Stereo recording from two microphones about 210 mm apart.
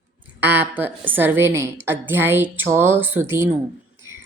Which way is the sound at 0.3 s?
10° right (ahead or behind).